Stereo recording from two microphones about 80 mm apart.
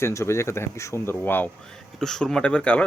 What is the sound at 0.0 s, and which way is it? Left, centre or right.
Speech, left.